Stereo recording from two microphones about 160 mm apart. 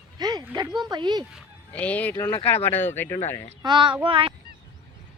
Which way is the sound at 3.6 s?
30° right (ahead or behind).